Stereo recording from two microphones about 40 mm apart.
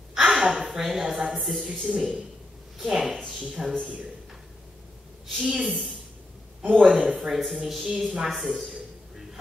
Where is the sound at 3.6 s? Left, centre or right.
Right.